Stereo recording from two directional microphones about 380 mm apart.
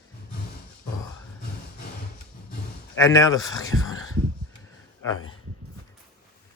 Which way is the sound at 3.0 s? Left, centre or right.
Centre.